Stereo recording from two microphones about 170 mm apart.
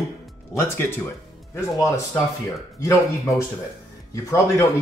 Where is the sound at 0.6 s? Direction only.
15° left (ahead or behind).